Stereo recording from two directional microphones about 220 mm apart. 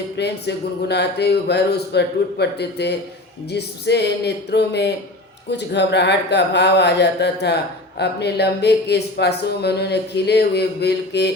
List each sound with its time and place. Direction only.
0.2 s speech: 50° left (ahead or behind)